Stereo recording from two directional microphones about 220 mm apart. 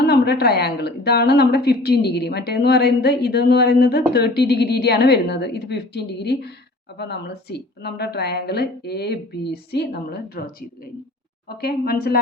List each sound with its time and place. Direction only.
0.0 s a woman's voice: 50° left (ahead or behind)